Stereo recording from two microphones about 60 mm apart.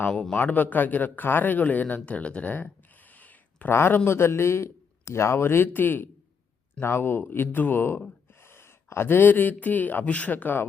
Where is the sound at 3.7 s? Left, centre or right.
Left.